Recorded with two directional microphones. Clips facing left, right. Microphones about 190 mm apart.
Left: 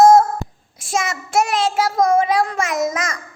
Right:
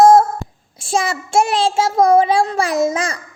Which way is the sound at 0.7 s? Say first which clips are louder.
Right 3 dB; 30° right (ahead or behind).